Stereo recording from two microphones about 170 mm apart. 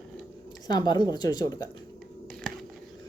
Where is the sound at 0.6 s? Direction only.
25° left (ahead or behind).